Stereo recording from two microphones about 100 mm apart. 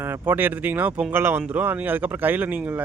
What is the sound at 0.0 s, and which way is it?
Speech, 20° right (ahead or behind).